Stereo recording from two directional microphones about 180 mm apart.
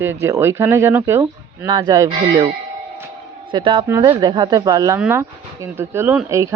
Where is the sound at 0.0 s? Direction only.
15° right (ahead or behind).